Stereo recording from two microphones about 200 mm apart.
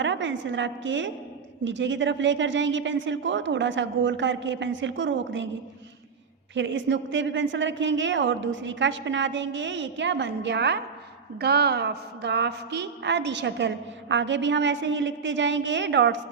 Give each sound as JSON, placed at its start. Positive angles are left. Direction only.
{"t": 0.0, "sound": "a woman's voice", "side_deg": -65}
{"t": 6.5, "sound": "a woman's voice", "side_deg": -65}